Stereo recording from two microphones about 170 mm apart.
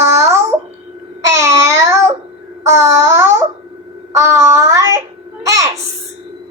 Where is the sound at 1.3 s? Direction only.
15° right (ahead or behind).